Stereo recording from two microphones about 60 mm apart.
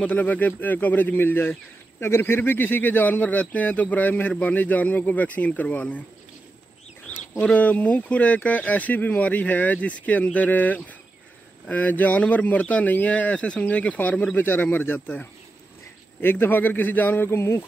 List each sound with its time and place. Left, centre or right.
0.1 s speech: left
7.4 s speech: left
14.4 s speech: left
17.3 s a sound: left